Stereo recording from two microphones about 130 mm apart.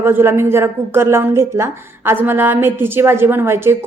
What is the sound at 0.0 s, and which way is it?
A woman's voice, 15° right (ahead or behind).